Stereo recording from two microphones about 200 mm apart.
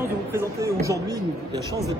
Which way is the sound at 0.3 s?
15° right (ahead or behind).